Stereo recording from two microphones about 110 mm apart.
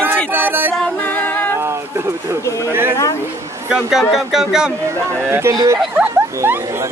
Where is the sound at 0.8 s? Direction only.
10° left (ahead or behind).